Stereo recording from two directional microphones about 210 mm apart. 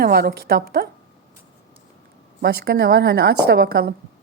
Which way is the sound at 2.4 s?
50° right (ahead or behind).